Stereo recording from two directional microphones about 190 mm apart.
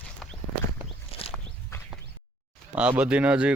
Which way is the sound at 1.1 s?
30° left (ahead or behind).